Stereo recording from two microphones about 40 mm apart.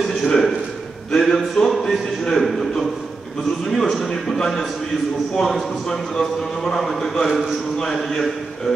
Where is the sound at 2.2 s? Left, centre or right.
Centre.